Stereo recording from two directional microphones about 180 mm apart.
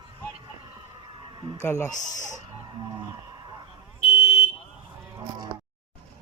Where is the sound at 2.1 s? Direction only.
45° left (ahead or behind).